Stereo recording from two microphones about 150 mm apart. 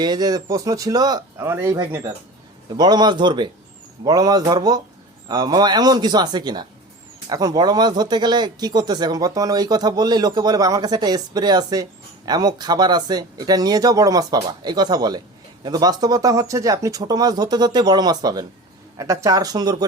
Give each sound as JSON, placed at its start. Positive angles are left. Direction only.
{"t": 0.0, "sound": "speech", "side_deg": -25}